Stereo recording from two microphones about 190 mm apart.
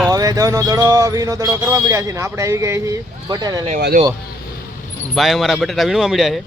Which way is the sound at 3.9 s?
45° right (ahead or behind).